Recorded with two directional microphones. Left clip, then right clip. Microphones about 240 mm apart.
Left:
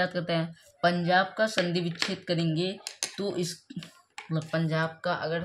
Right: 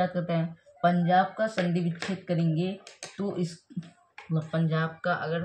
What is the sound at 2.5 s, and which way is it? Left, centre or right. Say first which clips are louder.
Speech: left 2 dB; left.